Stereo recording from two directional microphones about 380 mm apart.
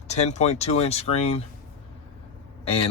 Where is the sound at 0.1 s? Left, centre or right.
Centre.